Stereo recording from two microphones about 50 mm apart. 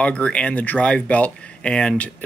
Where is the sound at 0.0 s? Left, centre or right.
Left.